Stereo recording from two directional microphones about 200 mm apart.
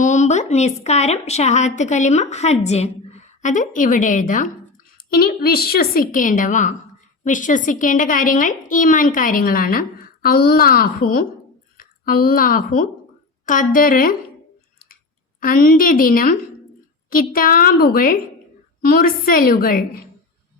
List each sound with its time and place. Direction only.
0.0 s a woman's voice: 35° left (ahead or behind)
15.4 s a woman's voice: 45° left (ahead or behind)